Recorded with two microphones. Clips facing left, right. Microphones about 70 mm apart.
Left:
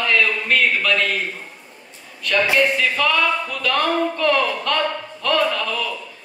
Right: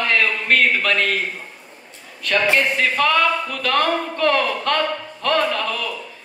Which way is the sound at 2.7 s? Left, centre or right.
Right.